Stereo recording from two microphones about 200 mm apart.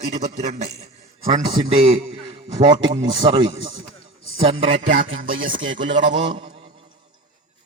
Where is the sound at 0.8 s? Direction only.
35° right (ahead or behind).